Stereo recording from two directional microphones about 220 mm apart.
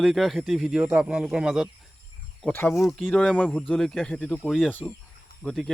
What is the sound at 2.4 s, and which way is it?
Speech, 10° left (ahead or behind).